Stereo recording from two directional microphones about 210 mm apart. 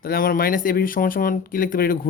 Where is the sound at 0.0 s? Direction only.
45° left (ahead or behind).